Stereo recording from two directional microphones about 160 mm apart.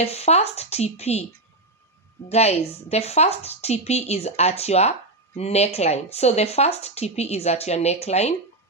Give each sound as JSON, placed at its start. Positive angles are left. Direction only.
{"t": 0.0, "sound": "speech", "side_deg": 40}
{"t": 2.3, "sound": "speech", "side_deg": 40}